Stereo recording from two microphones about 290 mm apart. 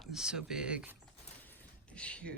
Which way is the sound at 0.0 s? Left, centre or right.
Centre.